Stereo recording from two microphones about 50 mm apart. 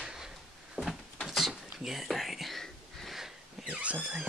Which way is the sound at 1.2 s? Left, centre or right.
Centre.